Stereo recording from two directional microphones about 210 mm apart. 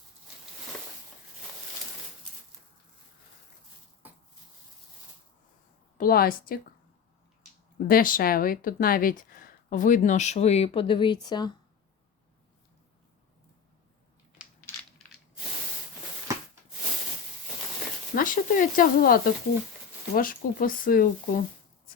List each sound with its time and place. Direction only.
6.0 s a woman's voice: 45° left (ahead or behind)
7.9 s speech: 40° left (ahead or behind); by 11.5 s 20° left (ahead or behind)
18.1 s speech: 40° left (ahead or behind)